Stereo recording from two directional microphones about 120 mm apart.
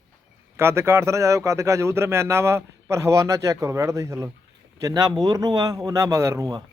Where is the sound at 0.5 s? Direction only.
20° right (ahead or behind).